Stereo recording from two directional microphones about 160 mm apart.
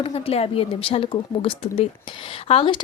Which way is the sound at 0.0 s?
40° left (ahead or behind).